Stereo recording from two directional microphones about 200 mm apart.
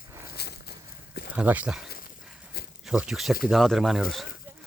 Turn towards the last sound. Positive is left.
turn(degrees=0)  # may be behind; listen again after turning